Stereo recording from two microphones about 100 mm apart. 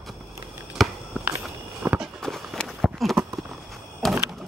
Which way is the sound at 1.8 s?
30° right (ahead or behind).